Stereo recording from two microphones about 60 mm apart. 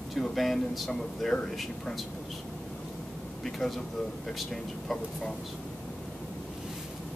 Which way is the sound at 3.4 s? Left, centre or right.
Centre.